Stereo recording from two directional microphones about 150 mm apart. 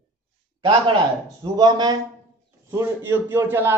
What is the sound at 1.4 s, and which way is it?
Speech, 30° right (ahead or behind).